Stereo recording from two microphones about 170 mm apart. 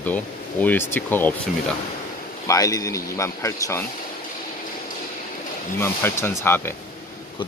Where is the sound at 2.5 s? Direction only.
20° left (ahead or behind).